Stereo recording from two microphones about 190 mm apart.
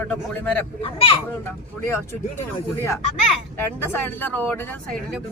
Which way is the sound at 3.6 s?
10° left (ahead or behind).